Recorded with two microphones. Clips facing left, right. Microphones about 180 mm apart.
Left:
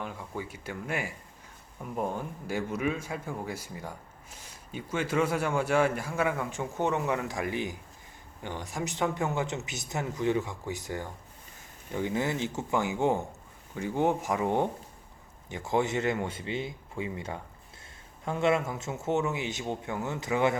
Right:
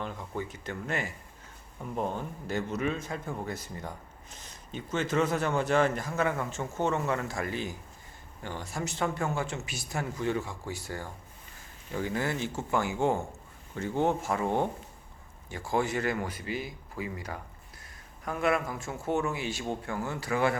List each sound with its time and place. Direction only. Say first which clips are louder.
0.0 s a man's voice: right 1 dB; 10° left (ahead or behind)